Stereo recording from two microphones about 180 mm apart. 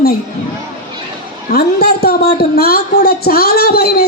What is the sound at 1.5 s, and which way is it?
Speech, 60° left (ahead or behind).